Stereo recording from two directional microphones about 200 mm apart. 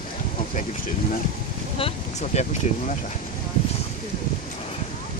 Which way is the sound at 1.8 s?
30° left (ahead or behind).